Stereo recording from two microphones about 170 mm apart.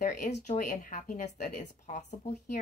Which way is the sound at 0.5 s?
45° left (ahead or behind).